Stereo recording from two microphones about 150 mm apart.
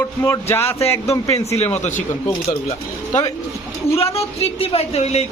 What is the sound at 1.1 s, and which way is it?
Speech, 20° left (ahead or behind).